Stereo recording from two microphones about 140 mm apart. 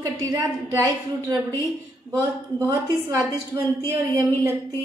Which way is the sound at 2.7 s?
25° right (ahead or behind).